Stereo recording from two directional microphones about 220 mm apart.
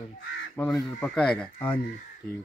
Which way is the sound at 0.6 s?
10° left (ahead or behind).